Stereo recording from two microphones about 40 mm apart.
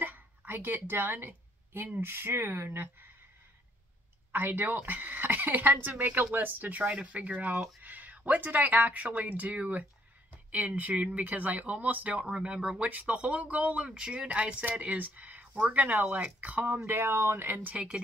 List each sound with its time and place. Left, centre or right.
0.0 s a sound: right
2.0 s speech: right
4.3 s a woman's voice: right
7.8 s a sound: right
8.3 s a woman's voice: right
12.3 s speech: right
13.8 s speech: right
14.8 s a woman's voice: right
16.3 s speech: right
16.7 s speech: right
17.9 s speech: right